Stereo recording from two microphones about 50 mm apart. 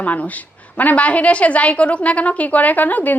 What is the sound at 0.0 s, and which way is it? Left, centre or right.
A woman's voice, left.